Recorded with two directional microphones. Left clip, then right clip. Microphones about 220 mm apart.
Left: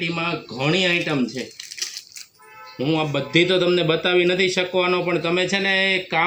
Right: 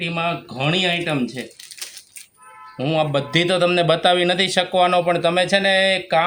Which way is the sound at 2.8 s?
50° right (ahead or behind).